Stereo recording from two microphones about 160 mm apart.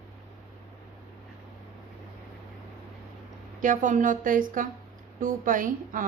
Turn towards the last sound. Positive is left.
turn(degrees=-55)  # may be behind; listen again after turning